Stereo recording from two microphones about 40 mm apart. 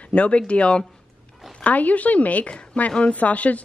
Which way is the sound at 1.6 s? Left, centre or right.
Left.